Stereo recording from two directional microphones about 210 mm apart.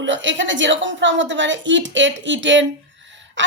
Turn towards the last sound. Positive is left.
turn(degrees=-60)  # may be behind; listen again after turning